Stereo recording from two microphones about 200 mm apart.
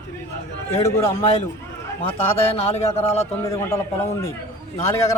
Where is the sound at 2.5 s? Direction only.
30° left (ahead or behind).